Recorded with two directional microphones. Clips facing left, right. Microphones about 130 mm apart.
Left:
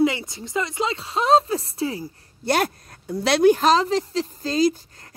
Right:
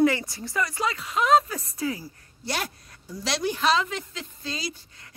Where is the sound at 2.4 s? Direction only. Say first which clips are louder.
Left 10 dB; 55° left (ahead or behind).